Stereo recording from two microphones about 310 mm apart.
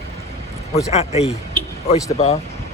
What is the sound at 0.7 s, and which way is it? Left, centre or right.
A man's voice, centre.